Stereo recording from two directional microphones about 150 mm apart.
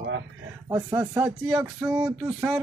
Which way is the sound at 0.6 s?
20° right (ahead or behind).